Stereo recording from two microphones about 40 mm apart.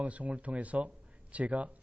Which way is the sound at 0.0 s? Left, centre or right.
Right.